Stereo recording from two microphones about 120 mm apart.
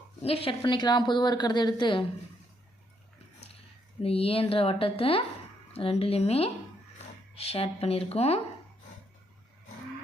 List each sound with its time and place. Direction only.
0.2 s a woman's voice: 55° left (ahead or behind)
4.0 s speech: 55° left (ahead or behind)